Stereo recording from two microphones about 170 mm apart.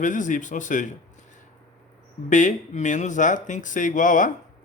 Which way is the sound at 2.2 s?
45° left (ahead or behind).